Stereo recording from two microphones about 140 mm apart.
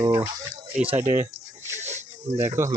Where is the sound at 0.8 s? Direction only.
15° right (ahead or behind).